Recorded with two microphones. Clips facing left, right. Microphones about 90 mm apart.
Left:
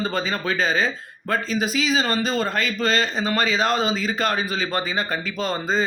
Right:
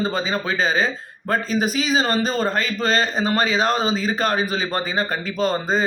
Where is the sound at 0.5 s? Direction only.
35° right (ahead or behind).